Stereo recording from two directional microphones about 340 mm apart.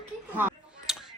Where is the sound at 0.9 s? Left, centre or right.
Centre.